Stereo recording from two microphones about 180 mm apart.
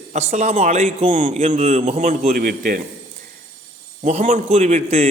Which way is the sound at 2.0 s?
45° right (ahead or behind).